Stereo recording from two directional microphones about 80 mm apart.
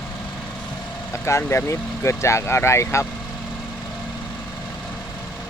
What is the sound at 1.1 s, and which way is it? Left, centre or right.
Vehicle, left.